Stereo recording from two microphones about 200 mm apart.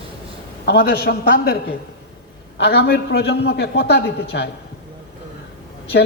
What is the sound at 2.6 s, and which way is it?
A man's voice, 55° left (ahead or behind).